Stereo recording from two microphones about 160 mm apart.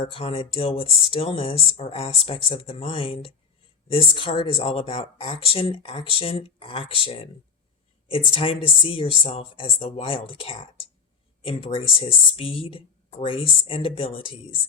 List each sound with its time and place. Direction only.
0.0 s speech: 35° left (ahead or behind)